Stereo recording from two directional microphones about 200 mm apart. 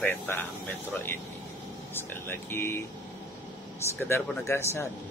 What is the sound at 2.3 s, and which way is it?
Speech, 10° left (ahead or behind).